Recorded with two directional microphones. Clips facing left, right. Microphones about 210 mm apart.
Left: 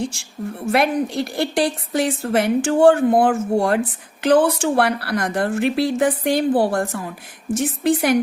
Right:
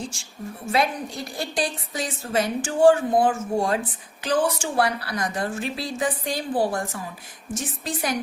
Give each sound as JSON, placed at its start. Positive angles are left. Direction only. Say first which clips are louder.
{"t": 0.7, "sound": "a woman's voice", "louder": "left 6 dB", "side_deg": 70}